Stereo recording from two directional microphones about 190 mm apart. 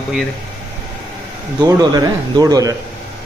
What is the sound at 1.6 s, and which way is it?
Speech, 20° right (ahead or behind).